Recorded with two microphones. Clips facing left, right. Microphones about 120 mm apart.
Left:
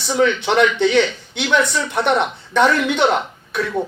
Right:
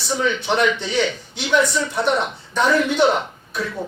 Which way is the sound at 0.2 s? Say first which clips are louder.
Left 5 dB; 70° left (ahead or behind).